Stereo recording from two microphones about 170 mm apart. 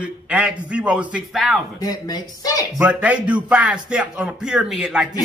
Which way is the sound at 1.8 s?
25° left (ahead or behind).